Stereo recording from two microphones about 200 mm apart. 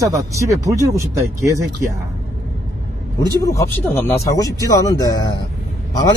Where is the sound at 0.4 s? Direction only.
15° right (ahead or behind).